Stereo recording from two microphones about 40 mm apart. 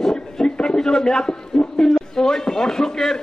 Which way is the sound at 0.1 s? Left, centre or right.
Left.